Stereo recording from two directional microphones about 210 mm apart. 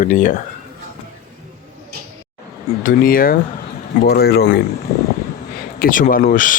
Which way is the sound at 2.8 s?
40° left (ahead or behind).